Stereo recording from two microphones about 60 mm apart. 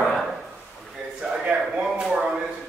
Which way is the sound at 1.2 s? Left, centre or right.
Centre.